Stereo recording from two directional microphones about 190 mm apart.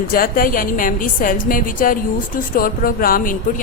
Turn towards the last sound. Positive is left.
turn(degrees=45)  # may be behind; listen again after turning